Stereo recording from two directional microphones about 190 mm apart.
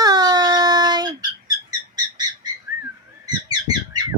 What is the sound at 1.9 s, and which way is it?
Bird, 20° right (ahead or behind).